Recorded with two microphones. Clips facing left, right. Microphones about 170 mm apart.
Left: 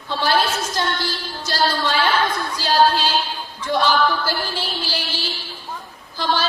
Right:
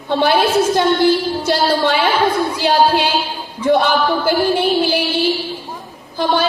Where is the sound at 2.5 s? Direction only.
60° right (ahead or behind).